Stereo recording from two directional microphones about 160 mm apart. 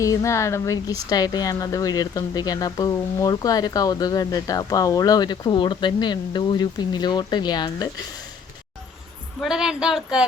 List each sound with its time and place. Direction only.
0.0 s speech: 20° left (ahead or behind)
9.4 s speech: 5° right (ahead or behind)